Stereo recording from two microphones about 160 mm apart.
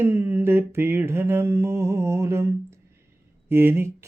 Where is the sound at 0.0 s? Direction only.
15° right (ahead or behind).